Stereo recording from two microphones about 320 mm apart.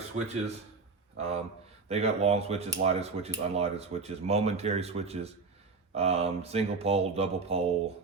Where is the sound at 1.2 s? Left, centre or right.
Centre.